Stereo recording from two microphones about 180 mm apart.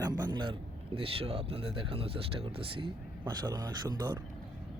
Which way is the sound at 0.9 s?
30° right (ahead or behind).